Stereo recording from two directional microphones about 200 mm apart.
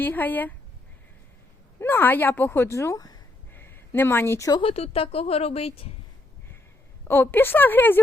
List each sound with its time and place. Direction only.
0.0 s speech: 10° left (ahead or behind)
1.8 s speech: 10° left (ahead or behind)
4.6 s a woman's voice: 30° left (ahead or behind)
7.1 s speech: 10° left (ahead or behind)